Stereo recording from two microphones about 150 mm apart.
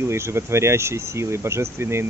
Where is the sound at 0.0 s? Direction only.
15° right (ahead or behind).